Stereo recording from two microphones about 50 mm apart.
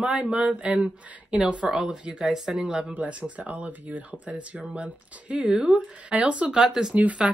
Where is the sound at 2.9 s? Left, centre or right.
Right.